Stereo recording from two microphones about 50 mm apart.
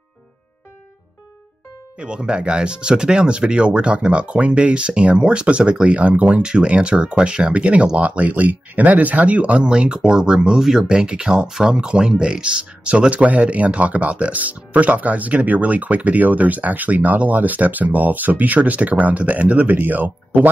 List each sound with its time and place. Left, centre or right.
2.0 s speech: centre; by 20.4 s right